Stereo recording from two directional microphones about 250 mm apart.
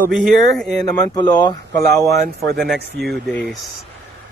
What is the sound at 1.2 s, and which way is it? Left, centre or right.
Speech, centre.